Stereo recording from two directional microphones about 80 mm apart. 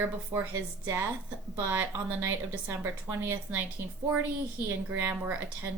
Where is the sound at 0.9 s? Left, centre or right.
Right.